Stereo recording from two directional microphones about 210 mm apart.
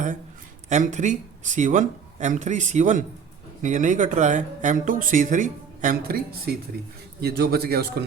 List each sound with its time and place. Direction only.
0.7 s a man's voice: 35° right (ahead or behind)